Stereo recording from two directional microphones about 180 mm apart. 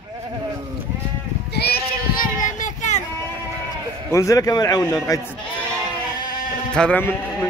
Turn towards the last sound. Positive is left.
turn(degrees=10)  # may be behind; listen again after turning